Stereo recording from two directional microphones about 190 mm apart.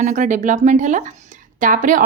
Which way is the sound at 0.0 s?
40° right (ahead or behind).